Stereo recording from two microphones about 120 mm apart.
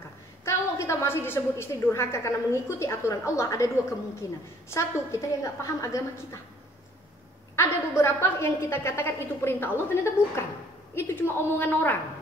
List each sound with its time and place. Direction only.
0.5 s a woman's voice: 25° left (ahead or behind)
7.5 s a woman's voice: 20° left (ahead or behind)
11.0 s a woman's voice: 20° left (ahead or behind)